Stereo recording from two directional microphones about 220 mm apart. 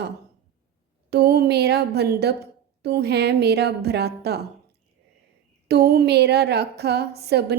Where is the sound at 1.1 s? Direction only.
45° right (ahead or behind).